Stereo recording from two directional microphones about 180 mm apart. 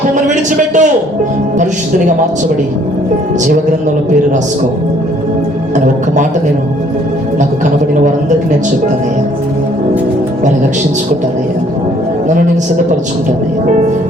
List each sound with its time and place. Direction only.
0.1 s a man's voice: 45° right (ahead or behind)